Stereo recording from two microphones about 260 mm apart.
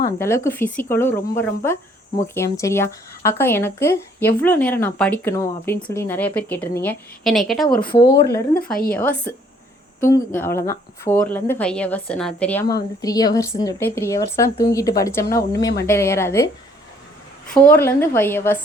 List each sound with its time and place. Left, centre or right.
0.0 s speech: centre
8.1 s speech: left
8.9 s speech: centre
17.5 s speech: centre